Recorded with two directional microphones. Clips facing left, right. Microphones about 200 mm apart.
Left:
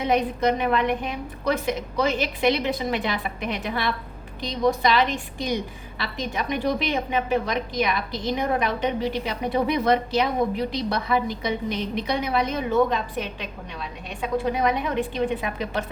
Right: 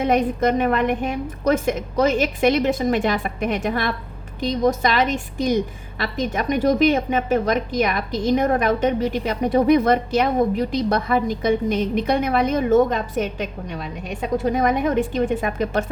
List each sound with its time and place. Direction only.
0.0 s a woman's voice: 50° right (ahead or behind)